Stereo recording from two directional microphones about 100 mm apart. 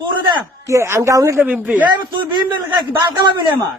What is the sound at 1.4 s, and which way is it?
Speech, 20° right (ahead or behind).